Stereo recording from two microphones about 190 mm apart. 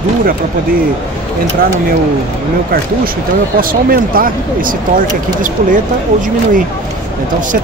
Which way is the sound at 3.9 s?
50° right (ahead or behind).